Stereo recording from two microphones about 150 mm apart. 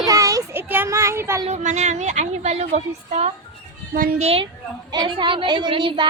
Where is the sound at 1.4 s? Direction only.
50° right (ahead or behind).